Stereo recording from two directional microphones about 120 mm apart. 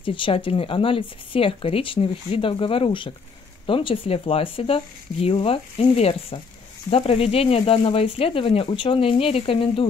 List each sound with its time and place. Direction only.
0.0 s speech: 45° left (ahead or behind)